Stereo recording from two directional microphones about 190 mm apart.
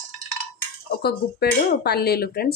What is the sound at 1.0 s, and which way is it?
Speech, 55° left (ahead or behind).